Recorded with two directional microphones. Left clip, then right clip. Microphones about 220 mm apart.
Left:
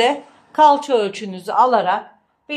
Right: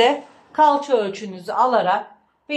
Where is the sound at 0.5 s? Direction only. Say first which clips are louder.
Left 3 dB; 35° left (ahead or behind).